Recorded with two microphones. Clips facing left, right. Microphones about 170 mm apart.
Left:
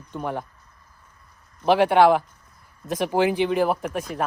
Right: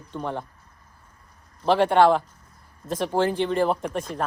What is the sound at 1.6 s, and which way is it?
Speech, 10° left (ahead or behind).